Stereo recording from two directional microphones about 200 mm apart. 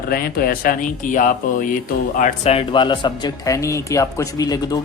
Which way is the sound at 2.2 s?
30° left (ahead or behind).